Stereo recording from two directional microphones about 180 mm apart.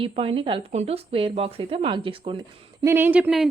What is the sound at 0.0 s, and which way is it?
Speech, 30° right (ahead or behind).